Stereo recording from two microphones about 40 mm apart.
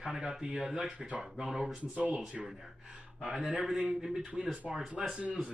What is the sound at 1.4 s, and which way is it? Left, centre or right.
Speech, centre.